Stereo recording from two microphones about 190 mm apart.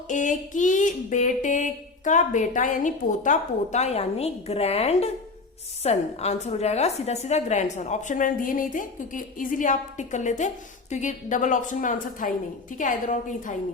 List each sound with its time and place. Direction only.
0.1 s a woman's voice: 40° left (ahead or behind)